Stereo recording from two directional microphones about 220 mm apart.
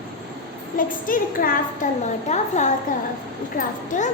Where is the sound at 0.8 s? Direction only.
40° left (ahead or behind).